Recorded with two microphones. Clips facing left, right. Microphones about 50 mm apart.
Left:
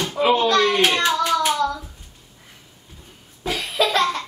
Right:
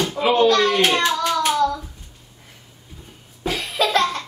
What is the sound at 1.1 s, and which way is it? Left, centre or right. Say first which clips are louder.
Music: even; centre.